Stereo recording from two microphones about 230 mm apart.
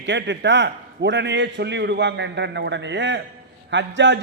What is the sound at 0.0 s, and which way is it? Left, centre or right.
A man's voice, right.